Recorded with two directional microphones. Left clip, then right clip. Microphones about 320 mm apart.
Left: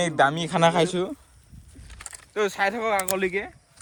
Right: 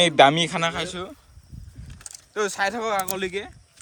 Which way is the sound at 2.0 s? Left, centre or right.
Centre.